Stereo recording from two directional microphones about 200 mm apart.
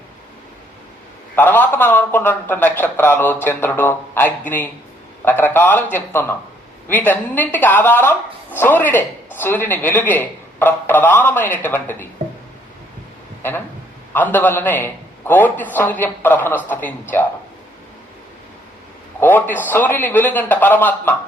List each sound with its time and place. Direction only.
1.4 s speech: 10° left (ahead or behind)
14.1 s speech: 10° left (ahead or behind)
19.2 s speech: 10° left (ahead or behind)